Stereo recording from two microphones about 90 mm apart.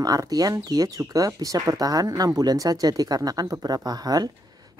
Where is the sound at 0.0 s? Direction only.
40° right (ahead or behind).